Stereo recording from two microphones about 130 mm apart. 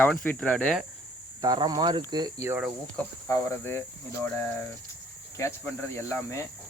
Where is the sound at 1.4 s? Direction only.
30° right (ahead or behind).